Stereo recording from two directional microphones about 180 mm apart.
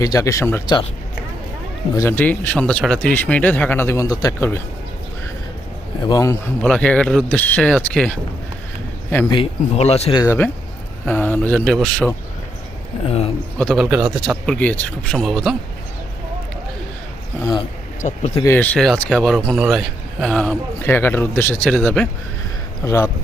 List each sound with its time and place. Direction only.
0.0 s speech: 20° left (ahead or behind)
2.0 s speech: 10° left (ahead or behind)
6.0 s speech: 20° left (ahead or behind)
6.6 s speech: 5° left (ahead or behind)
9.3 s speech: 30° left (ahead or behind)
10.2 s a man's voice: 10° left (ahead or behind)
13.1 s speech: 35° left (ahead or behind)
13.6 s a man's voice: 5° left (ahead or behind)
18.0 s speech: 40° left (ahead or behind)
18.4 s a man's voice: 10° left (ahead or behind)
20.8 s speech: 10° left (ahead or behind)
22.8 s speech: 15° left (ahead or behind)